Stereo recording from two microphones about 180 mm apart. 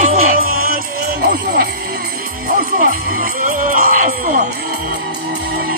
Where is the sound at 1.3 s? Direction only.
65° right (ahead or behind).